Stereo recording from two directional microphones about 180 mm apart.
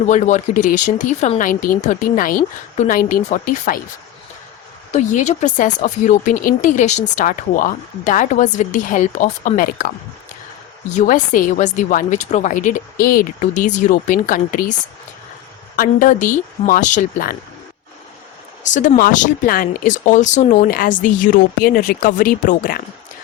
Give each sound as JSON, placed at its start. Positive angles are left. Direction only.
{"t": 0.1, "sound": "speech", "side_deg": 40}
{"t": 4.9, "sound": "speech", "side_deg": 40}
{"t": 10.9, "sound": "speech", "side_deg": 50}
{"t": 18.6, "sound": "speech", "side_deg": 45}